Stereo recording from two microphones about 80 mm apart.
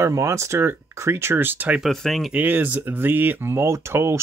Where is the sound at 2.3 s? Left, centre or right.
Right.